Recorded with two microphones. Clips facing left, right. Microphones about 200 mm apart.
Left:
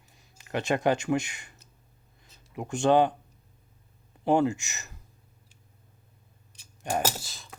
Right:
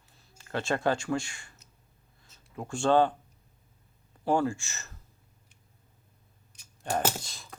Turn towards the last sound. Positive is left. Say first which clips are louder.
# right 1 dB
turn(degrees=0)  # may be behind; listen again after turning